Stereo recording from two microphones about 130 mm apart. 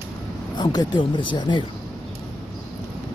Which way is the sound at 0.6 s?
35° left (ahead or behind).